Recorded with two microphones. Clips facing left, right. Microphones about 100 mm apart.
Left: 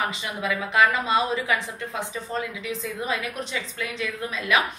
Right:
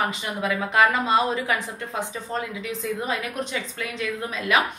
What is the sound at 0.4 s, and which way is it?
A woman's voice, 45° right (ahead or behind).